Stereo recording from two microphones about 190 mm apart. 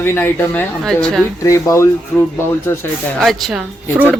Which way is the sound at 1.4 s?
15° left (ahead or behind).